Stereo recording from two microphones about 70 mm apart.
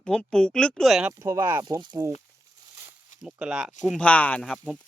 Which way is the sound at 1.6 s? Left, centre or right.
Right.